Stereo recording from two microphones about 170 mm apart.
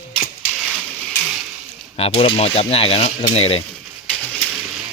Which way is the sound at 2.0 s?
35° left (ahead or behind).